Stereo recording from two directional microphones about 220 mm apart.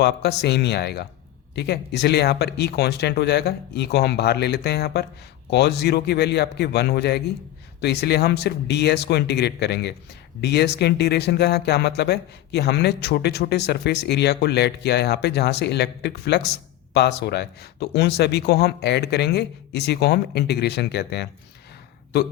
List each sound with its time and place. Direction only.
0.0 s speech: 50° left (ahead or behind)